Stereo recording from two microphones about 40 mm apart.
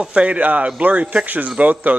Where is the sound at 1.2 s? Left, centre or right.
Right.